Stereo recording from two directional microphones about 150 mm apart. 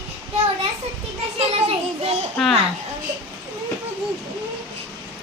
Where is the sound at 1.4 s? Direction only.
40° right (ahead or behind).